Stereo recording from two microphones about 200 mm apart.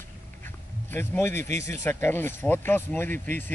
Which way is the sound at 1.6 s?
15° left (ahead or behind).